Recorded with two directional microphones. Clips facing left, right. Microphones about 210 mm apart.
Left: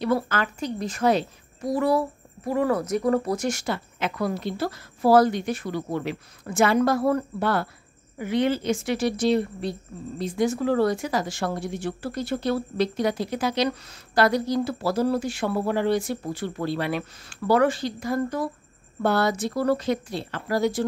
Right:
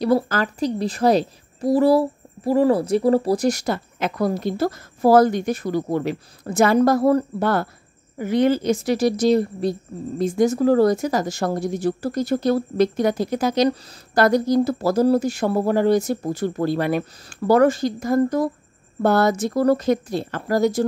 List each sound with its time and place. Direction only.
0.0 s a woman's voice: 35° right (ahead or behind)